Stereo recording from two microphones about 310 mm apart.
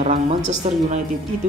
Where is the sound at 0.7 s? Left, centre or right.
Right.